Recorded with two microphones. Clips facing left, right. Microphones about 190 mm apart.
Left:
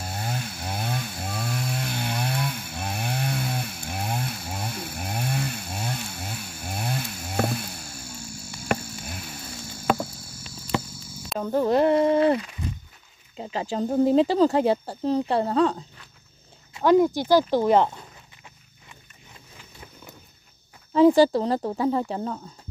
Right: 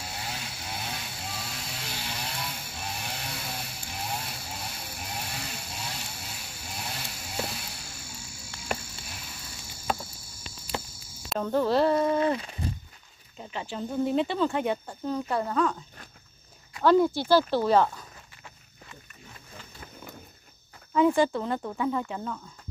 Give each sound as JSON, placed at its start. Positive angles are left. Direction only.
{"t": 0.0, "sound": "snoring", "side_deg": 50}
{"t": 8.6, "sound": "a sound", "side_deg": 55}
{"t": 9.9, "sound": "cricket", "side_deg": 65}
{"t": 10.7, "sound": "a sound", "side_deg": 90}
{"t": 11.2, "sound": "speech", "side_deg": 5}
{"t": 12.4, "sound": "walk", "side_deg": -35}
{"t": 13.7, "sound": "speech", "side_deg": 40}
{"t": 16.7, "sound": "speech", "side_deg": 15}
{"t": 20.9, "sound": "speech", "side_deg": 35}